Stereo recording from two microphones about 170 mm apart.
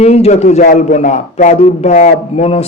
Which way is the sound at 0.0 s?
40° left (ahead or behind).